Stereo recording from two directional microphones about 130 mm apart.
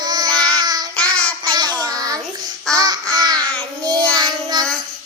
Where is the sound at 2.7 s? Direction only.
30° right (ahead or behind).